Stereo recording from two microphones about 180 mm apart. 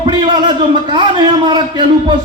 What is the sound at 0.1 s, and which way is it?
Speech, 25° right (ahead or behind).